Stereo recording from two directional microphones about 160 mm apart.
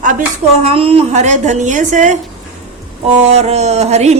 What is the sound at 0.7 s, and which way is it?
A woman's voice, 35° right (ahead or behind).